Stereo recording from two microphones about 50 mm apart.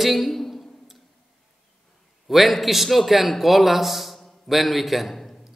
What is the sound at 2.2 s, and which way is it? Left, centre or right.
A man's voice, centre.